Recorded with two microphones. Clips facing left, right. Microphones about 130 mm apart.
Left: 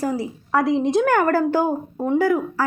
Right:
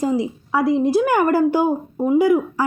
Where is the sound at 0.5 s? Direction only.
5° right (ahead or behind).